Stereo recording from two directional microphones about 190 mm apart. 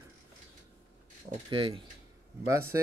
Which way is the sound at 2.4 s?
15° right (ahead or behind).